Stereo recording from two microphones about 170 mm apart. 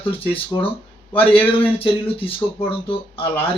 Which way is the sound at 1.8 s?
35° left (ahead or behind).